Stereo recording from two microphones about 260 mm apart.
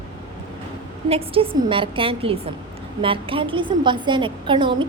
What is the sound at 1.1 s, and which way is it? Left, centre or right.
A woman's voice, right.